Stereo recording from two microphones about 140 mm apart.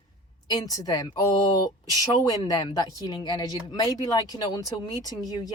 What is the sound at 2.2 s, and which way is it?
Speech, 25° left (ahead or behind).